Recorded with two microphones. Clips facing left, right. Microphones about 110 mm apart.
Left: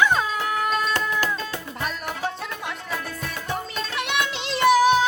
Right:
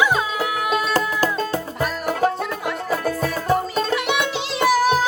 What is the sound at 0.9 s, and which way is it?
Music, 40° right (ahead or behind).